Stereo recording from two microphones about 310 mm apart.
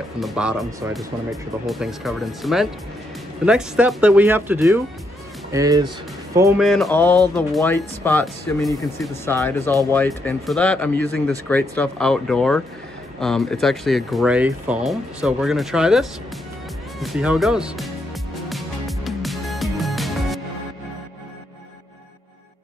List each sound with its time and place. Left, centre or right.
0.2 s speech: centre
6.6 s speech: centre
18.5 s music: centre